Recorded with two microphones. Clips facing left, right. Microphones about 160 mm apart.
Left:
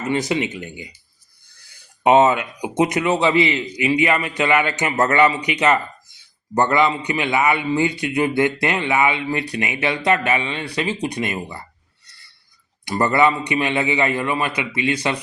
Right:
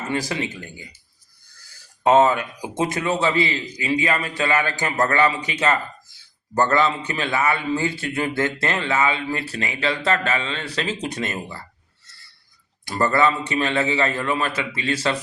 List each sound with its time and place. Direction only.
0.1 s a man's voice: 20° left (ahead or behind)
2.0 s a man's voice: 20° left (ahead or behind)
12.8 s speech: 15° left (ahead or behind)